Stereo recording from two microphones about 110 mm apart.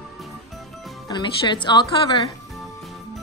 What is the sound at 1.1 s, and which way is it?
Speech, 45° left (ahead or behind).